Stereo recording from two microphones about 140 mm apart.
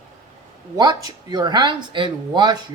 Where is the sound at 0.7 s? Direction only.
30° right (ahead or behind).